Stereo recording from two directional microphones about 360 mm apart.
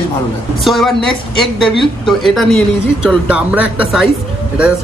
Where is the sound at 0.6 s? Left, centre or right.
Centre.